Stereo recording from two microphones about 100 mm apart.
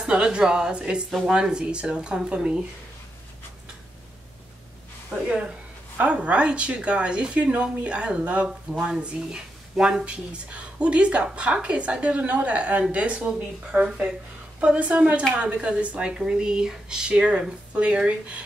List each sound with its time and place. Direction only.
0.0 s speech: 10° right (ahead or behind)
5.9 s speech: 15° right (ahead or behind)